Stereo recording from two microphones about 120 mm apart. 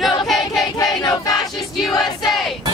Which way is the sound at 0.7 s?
30° left (ahead or behind).